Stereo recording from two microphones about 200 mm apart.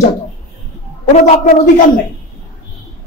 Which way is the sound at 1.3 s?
35° left (ahead or behind).